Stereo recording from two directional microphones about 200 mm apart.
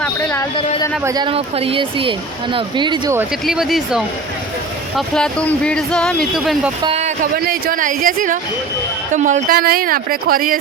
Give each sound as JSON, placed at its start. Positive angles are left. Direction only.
{"t": 1.0, "sound": "speech", "side_deg": -20}
{"t": 3.4, "sound": "speech", "side_deg": 0}
{"t": 6.8, "sound": "a sound", "side_deg": -30}
{"t": 7.3, "sound": "speech", "side_deg": -45}